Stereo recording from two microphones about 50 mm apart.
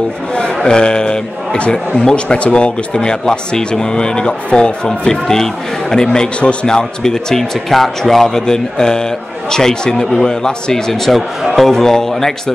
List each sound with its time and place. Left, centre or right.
0.7 s speech: centre